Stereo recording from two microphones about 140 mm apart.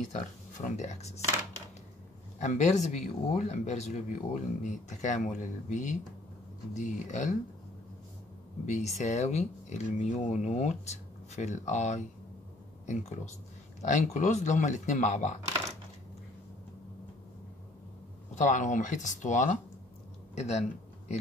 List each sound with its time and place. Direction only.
0.0 s speech: 60° left (ahead or behind)
2.3 s speech: 55° left (ahead or behind)
8.6 s speech: 55° left (ahead or behind)
18.3 s speech: 60° left (ahead or behind)